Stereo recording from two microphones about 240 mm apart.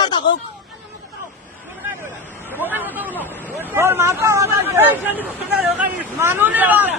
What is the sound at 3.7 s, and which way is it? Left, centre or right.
Speech, centre.